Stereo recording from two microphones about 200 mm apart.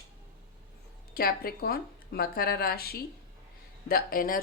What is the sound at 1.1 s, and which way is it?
Speech, 50° left (ahead or behind).